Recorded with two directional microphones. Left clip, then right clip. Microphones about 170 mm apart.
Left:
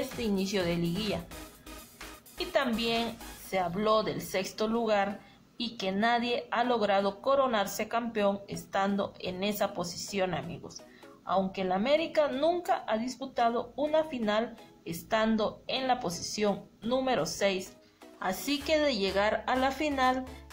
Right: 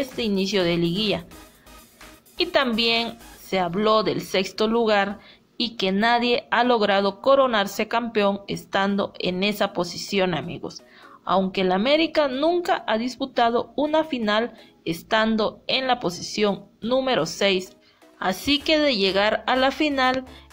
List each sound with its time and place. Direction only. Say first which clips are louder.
0.2 s a woman's voice: right 9 dB; 20° right (ahead or behind)
2.3 s a woman's voice: right 9 dB; 25° right (ahead or behind)